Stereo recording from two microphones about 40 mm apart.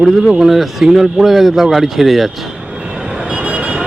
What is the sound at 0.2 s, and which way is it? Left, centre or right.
Speech, right.